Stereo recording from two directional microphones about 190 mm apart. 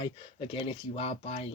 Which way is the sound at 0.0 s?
25° left (ahead or behind).